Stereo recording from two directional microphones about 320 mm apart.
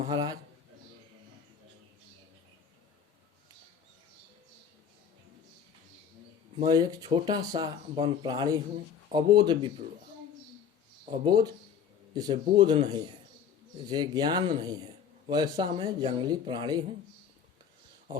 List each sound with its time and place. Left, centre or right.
0.0 s a man's voice: centre
6.6 s speech: centre
11.3 s speech: centre
18.1 s speech: centre